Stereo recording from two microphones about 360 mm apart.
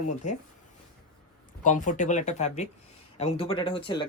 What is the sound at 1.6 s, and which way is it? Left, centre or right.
Speech, left.